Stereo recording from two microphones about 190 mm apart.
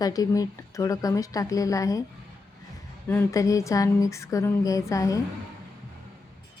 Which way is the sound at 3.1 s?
15° left (ahead or behind).